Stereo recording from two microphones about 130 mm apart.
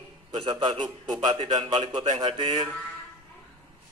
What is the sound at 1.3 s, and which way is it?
Speech, 50° right (ahead or behind).